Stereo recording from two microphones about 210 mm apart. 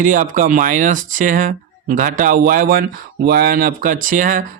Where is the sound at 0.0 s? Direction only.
40° right (ahead or behind).